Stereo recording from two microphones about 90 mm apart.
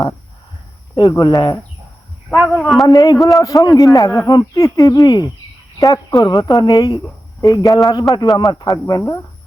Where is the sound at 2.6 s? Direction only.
Centre (ahead or behind).